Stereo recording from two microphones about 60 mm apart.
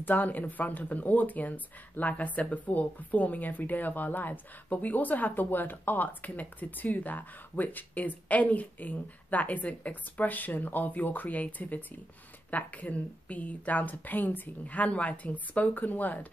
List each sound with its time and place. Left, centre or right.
0.0 s speech: left